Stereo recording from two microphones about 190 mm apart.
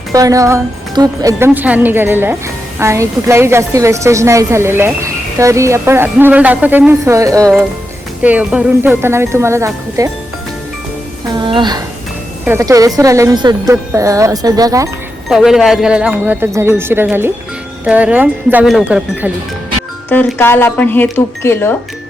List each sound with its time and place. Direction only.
0.1 s a woman's voice: 15° right (ahead or behind)
11.3 s a woman's voice: 25° right (ahead or behind)
15.3 s a woman's voice: centre (ahead or behind)
20.1 s speech: 10° left (ahead or behind)